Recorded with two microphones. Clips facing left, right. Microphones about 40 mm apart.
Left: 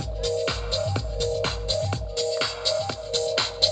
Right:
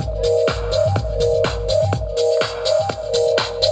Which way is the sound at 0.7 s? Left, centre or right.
Centre.